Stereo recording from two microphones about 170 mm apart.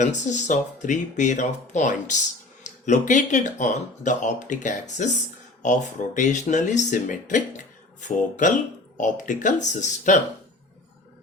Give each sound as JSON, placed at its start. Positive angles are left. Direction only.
{"t": 0.0, "sound": "speech", "side_deg": 45}
{"t": 2.6, "sound": "a sound", "side_deg": 45}
{"t": 3.1, "sound": "speech", "side_deg": 45}